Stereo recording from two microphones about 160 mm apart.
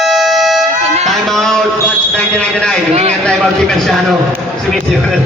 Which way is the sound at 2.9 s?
40° right (ahead or behind).